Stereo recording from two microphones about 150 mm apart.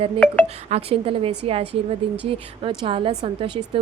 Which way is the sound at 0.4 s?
45° right (ahead or behind).